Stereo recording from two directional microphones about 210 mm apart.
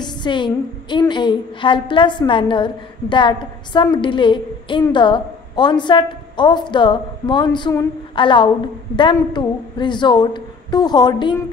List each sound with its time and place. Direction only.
0.0 s a woman's voice: 20° left (ahead or behind)